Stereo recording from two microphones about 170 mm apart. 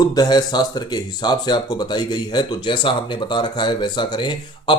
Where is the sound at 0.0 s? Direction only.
25° left (ahead or behind).